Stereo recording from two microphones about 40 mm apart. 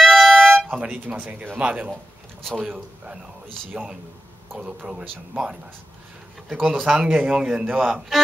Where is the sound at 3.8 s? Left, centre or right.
Right.